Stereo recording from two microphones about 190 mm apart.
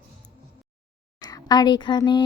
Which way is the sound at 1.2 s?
20° left (ahead or behind).